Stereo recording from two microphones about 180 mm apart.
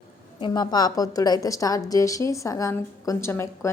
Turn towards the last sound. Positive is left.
turn(degrees=15)  # may be behind; listen again after turning